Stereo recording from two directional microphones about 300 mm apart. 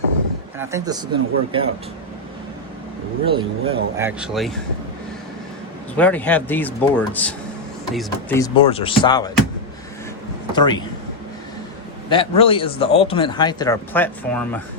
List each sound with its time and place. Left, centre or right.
0.6 s speech: centre
3.2 s speech: centre
6.0 s a man's voice: centre
10.5 s a man's voice: centre
12.0 s a man's voice: centre